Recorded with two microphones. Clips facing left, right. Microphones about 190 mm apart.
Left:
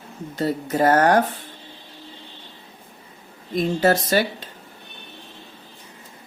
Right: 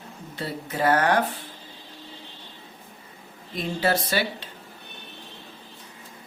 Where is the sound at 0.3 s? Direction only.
45° left (ahead or behind).